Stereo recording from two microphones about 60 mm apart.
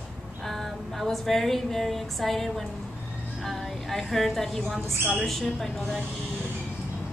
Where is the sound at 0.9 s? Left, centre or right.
Centre.